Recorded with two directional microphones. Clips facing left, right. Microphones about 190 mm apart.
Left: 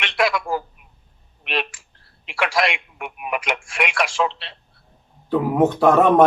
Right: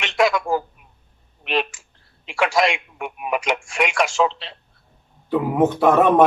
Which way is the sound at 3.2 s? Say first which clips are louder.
Right 3 dB; 40° right (ahead or behind).